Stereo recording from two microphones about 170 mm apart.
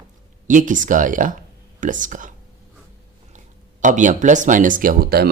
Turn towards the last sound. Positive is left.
turn(degrees=-65)  # may be behind; listen again after turning